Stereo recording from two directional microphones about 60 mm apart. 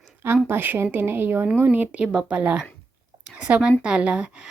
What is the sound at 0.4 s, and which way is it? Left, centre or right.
Speech, right.